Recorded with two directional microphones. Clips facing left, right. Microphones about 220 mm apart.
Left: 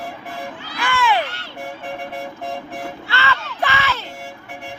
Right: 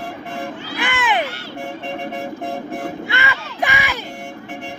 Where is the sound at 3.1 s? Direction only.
15° right (ahead or behind).